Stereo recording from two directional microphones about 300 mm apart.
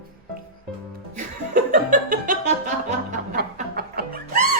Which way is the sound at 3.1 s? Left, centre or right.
Right.